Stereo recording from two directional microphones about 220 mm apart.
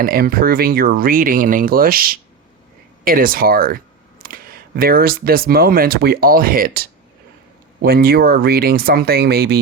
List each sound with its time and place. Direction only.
0.0 s speech: 40° right (ahead or behind)